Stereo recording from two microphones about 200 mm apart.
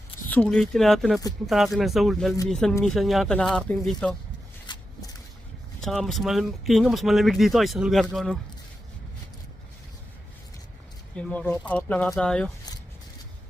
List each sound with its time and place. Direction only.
0.3 s speech: 5° left (ahead or behind)
4.6 s a sound: 20° left (ahead or behind)
5.8 s speech: centre (ahead or behind)
11.2 s speech: 5° left (ahead or behind)